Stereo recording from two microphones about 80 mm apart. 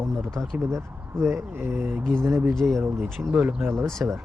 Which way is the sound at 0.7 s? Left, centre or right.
Right.